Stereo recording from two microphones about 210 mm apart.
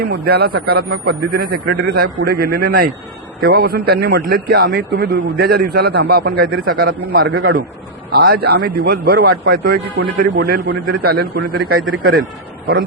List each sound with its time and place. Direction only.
0.0 s speech: 50° right (ahead or behind)
11.7 s a man's voice: 75° right (ahead or behind)
12.1 s a man's voice: 45° right (ahead or behind)